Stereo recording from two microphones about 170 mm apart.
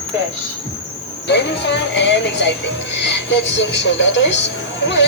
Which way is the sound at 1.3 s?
90° left.